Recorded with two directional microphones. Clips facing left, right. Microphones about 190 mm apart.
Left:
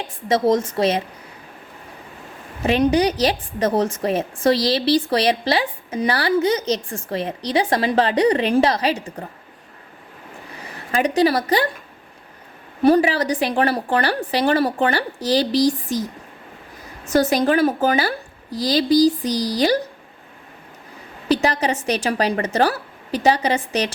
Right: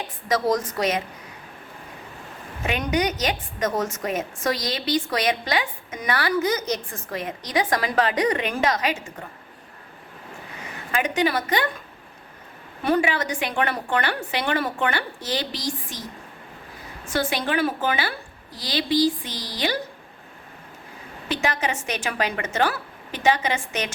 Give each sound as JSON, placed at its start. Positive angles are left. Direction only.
{"t": 0.3, "sound": "a woman's voice", "side_deg": 25}
{"t": 2.6, "sound": "a woman's voice", "side_deg": 30}
{"t": 10.6, "sound": "speech", "side_deg": 35}
{"t": 12.8, "sound": "a woman's voice", "side_deg": 35}
{"t": 17.1, "sound": "a woman's voice", "side_deg": 40}
{"t": 21.2, "sound": "a woman's voice", "side_deg": 35}